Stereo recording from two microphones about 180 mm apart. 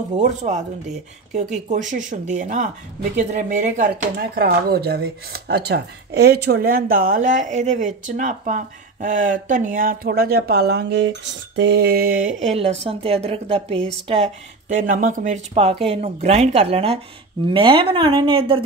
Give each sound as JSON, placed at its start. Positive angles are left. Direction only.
{"t": 0.2, "sound": "a woman's voice", "side_deg": -40}